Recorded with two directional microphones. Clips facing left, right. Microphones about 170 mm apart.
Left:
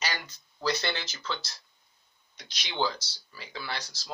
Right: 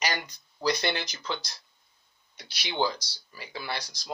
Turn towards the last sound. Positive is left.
turn(degrees=-10)  # may be behind; listen again after turning